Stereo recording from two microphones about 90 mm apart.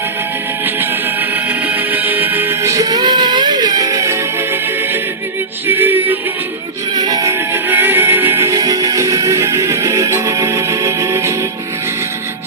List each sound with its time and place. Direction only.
1.5 s music: 20° right (ahead or behind); by 4.2 s 40° right (ahead or behind)
5.6 s music: 25° right (ahead or behind)
6.9 s music: 45° right (ahead or behind)
7.5 s music: 20° right (ahead or behind)